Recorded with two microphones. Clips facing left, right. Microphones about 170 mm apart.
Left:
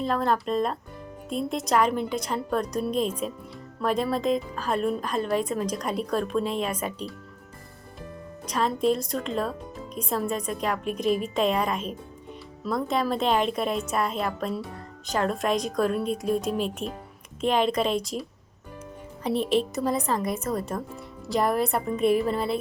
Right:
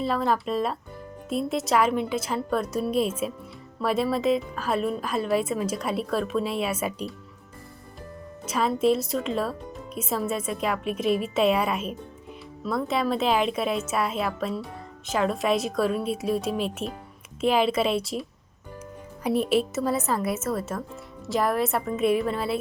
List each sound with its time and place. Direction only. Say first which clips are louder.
0.0 s a woman's voice: even; 5° right (ahead or behind)
8.4 s a woman's voice: right 2 dB; 5° right (ahead or behind)